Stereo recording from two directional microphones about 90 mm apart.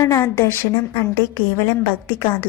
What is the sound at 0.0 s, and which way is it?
A woman's voice, 35° left (ahead or behind).